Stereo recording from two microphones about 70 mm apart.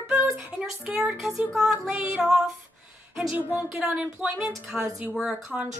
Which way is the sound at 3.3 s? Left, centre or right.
Right.